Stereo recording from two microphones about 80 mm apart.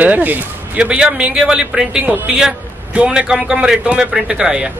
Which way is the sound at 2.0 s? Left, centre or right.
Right.